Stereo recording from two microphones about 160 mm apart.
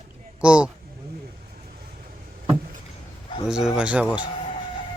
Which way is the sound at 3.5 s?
5° right (ahead or behind).